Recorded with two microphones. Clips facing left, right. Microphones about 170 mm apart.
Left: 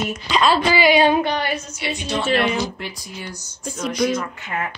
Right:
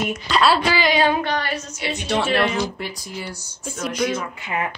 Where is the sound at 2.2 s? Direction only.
Centre (ahead or behind).